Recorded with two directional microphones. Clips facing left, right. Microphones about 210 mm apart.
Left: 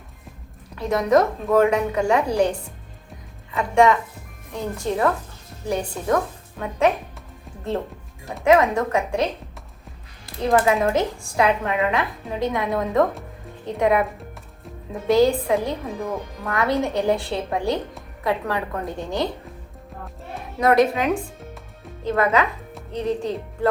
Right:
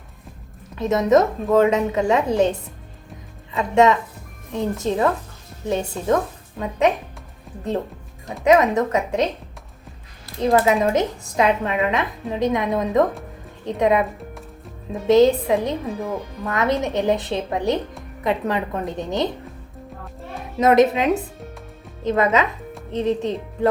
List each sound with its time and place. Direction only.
0.8 s a woman's voice: 20° right (ahead or behind)
8.4 s a woman's voice: 20° right (ahead or behind)
10.4 s a woman's voice: 20° right (ahead or behind)
15.0 s a woman's voice: 20° right (ahead or behind)
20.6 s a woman's voice: 20° right (ahead or behind)